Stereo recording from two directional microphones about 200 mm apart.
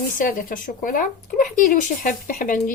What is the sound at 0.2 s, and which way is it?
Speech, 45° left (ahead or behind).